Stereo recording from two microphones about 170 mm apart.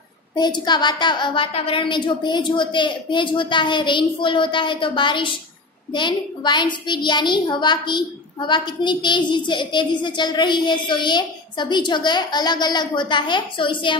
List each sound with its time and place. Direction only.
0.4 s a child's voice: 25° left (ahead or behind)